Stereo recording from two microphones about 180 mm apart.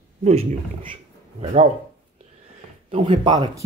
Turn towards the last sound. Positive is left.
turn(degrees=-20)  # may be behind; listen again after turning